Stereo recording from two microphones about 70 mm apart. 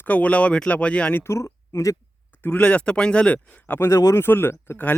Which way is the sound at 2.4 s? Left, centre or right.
Centre.